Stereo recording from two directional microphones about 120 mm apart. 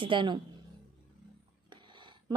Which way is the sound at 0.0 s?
40° right (ahead or behind).